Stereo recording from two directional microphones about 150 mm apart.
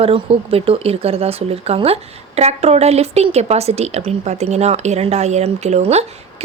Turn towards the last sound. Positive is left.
turn(degrees=-45)  # may be behind; listen again after turning